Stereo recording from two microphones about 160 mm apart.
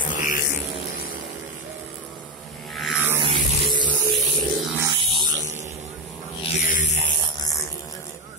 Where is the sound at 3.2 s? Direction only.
30° right (ahead or behind).